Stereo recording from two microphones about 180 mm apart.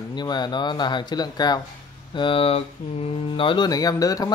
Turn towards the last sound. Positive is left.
turn(degrees=20)  # may be behind; listen again after turning